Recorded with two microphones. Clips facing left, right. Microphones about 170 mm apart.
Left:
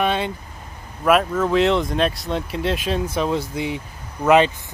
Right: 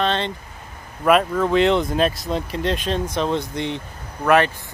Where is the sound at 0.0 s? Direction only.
10° left (ahead or behind).